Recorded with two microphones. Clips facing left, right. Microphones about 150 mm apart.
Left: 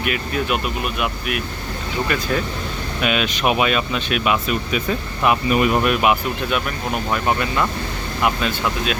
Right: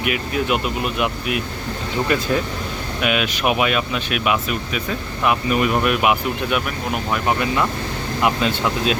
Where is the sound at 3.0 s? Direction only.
10° right (ahead or behind).